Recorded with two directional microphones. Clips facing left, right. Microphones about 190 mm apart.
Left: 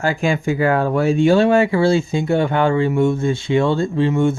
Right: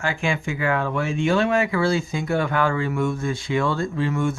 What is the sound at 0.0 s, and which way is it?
Speech, 40° left (ahead or behind).